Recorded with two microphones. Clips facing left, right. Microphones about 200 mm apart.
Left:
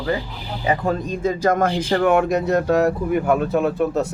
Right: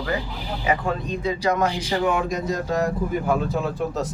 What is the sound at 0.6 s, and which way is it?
Speech, 40° left (ahead or behind).